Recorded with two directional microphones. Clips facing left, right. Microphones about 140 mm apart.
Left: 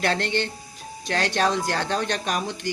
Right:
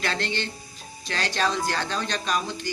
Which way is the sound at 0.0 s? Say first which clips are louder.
Left 4 dB; 55° left (ahead or behind).